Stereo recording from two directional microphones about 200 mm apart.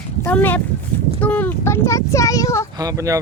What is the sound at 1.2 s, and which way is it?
Speech, 10° left (ahead or behind).